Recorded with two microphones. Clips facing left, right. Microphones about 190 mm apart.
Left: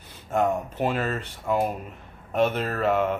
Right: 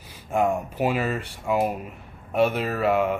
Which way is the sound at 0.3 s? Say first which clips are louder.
Right 1 dB; 10° right (ahead or behind).